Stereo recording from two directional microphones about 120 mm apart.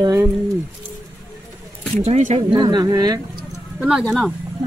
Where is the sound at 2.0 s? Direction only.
75° right (ahead or behind).